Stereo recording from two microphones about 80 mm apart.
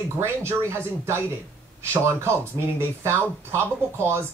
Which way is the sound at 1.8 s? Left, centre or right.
Right.